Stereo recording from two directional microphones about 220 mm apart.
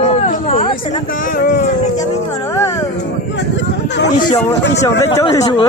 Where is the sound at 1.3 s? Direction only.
40° left (ahead or behind).